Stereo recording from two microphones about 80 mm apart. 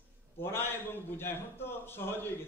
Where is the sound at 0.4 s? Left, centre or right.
Left.